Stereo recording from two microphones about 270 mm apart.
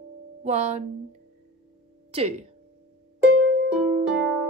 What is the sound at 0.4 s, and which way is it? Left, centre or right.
Speech, right.